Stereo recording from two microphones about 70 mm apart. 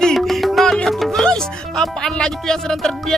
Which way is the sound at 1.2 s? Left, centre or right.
Centre.